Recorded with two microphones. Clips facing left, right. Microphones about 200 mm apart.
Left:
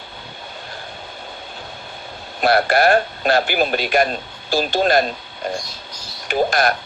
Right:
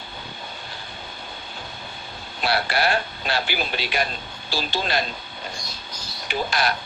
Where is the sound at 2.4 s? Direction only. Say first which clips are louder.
Left 8 dB; 50° left (ahead or behind).